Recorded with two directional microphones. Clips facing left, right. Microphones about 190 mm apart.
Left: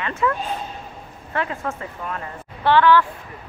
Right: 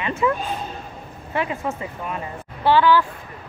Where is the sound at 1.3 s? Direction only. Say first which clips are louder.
Right 1 dB; 15° right (ahead or behind).